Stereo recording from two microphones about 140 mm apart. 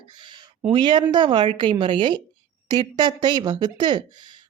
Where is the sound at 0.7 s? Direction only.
35° right (ahead or behind).